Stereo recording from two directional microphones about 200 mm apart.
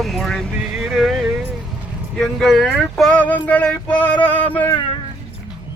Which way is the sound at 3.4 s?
5° left (ahead or behind).